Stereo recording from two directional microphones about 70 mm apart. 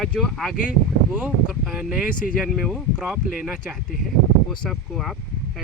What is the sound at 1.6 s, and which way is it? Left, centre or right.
Speech, centre.